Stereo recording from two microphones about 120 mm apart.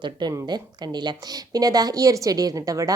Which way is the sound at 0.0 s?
35° right (ahead or behind).